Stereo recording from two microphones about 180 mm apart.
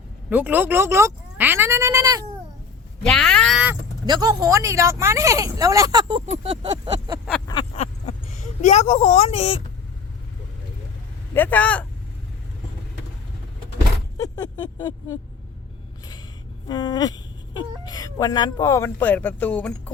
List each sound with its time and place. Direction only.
0.3 s speech: 10° right (ahead or behind)
3.0 s speech: 5° left (ahead or behind)
4.0 s speech: 20° right (ahead or behind)
8.6 s speech: 35° left (ahead or behind)
11.3 s speech: 10° left (ahead or behind)
14.2 s speech: 20° left (ahead or behind)
16.6 s speech: 25° left (ahead or behind); by 19.9 s 5° left (ahead or behind)